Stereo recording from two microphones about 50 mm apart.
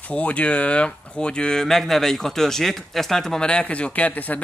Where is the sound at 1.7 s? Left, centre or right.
Centre.